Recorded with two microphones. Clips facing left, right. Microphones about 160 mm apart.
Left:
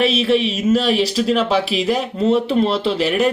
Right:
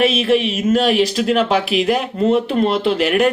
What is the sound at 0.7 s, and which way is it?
Speech, 50° right (ahead or behind).